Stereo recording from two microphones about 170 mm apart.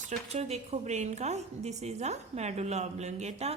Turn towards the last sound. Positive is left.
turn(degrees=-40)  # may be behind; listen again after turning